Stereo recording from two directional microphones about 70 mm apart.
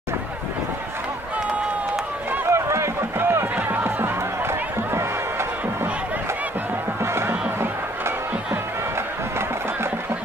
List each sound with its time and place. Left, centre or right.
2.5 s run: right
3.5 s music: right
7.0 s music: right